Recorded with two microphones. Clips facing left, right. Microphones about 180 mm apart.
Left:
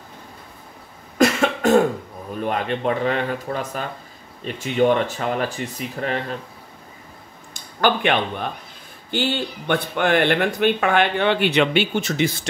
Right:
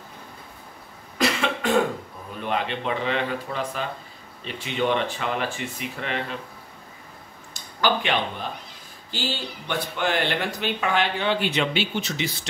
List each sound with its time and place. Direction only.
1.1 s cough: 45° left (ahead or behind)
2.4 s speech: 45° left (ahead or behind)
7.8 s speech: 55° left (ahead or behind)